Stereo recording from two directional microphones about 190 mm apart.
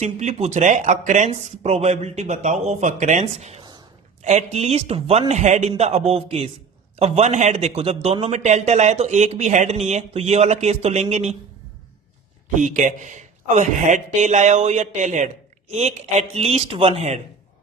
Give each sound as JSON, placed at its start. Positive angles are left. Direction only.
{"t": 0.0, "sound": "a man's voice", "side_deg": -40}
{"t": 12.5, "sound": "a man's voice", "side_deg": -40}